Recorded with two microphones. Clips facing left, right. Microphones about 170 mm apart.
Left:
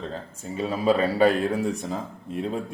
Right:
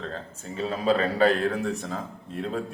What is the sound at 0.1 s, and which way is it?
A man's voice, 15° left (ahead or behind).